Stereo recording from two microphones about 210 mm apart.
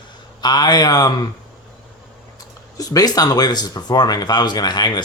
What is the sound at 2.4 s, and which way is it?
Speech, 15° left (ahead or behind).